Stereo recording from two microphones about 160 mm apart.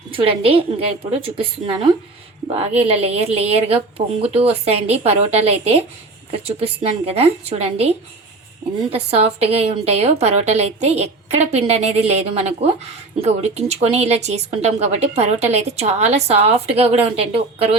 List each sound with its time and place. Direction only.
0.1 s a woman's voice: 35° right (ahead or behind)